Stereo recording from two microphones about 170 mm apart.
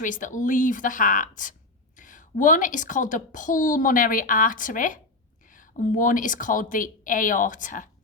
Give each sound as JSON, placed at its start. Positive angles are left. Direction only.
{"t": 0.0, "sound": "a woman's voice", "side_deg": 50}